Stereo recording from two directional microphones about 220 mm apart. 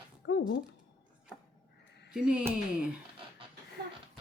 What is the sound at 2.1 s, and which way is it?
Speech, 5° right (ahead or behind).